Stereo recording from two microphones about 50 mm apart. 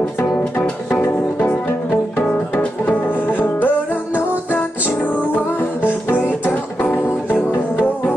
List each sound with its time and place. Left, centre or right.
2.6 s music: left
5.9 s music: left